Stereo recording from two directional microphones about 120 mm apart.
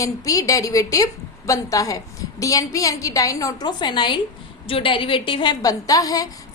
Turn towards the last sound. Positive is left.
turn(degrees=30)  # may be behind; listen again after turning